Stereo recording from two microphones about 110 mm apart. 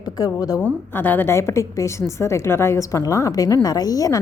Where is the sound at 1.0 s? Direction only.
20° left (ahead or behind).